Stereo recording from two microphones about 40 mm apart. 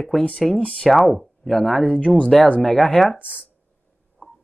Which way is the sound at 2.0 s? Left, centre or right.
Left.